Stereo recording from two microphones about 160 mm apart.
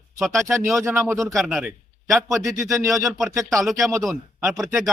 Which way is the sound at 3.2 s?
Centre (ahead or behind).